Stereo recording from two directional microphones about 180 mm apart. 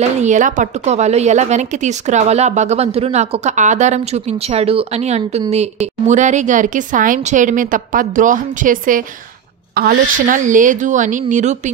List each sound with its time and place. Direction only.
0.2 s a woman's voice: 45° right (ahead or behind)